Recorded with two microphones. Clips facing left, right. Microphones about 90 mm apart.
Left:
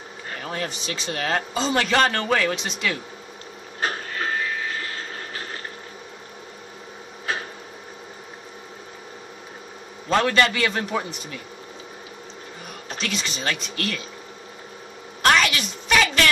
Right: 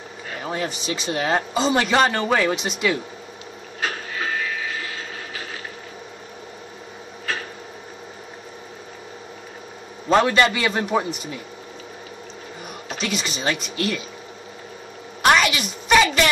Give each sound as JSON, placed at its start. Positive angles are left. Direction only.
{"t": 0.4, "sound": "speech", "side_deg": -15}
{"t": 10.0, "sound": "speech", "side_deg": -15}
{"t": 13.0, "sound": "speech", "side_deg": -10}
{"t": 15.2, "sound": "a sound", "side_deg": -10}